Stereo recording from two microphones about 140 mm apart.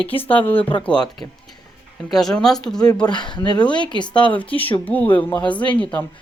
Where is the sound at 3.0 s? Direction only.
35° left (ahead or behind).